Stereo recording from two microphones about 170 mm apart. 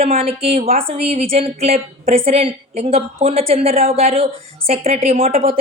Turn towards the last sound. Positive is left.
turn(degrees=-40)  # may be behind; listen again after turning